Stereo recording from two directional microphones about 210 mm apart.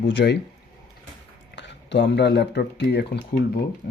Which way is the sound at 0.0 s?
55° left (ahead or behind).